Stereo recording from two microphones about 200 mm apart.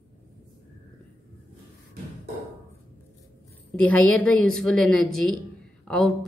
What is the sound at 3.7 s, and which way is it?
A woman's voice, 5° left (ahead or behind).